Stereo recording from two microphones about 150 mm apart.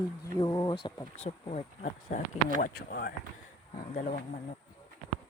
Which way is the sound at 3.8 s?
60° left (ahead or behind).